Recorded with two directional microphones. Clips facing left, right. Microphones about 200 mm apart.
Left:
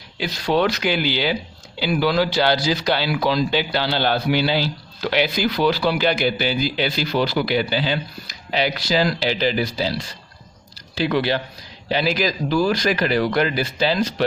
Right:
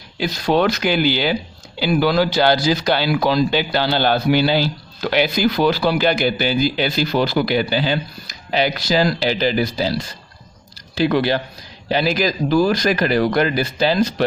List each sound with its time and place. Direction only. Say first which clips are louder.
0.2 s speech: right 2 dB; 45° right (ahead or behind)